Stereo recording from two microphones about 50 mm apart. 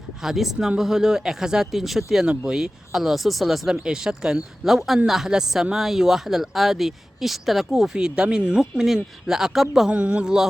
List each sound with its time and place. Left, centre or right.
0.2 s speech: centre
2.2 s speech: right
2.6 s speech: centre
3.8 s speech: centre
4.7 s speech: centre
7.9 s speech: centre
9.9 s speech: right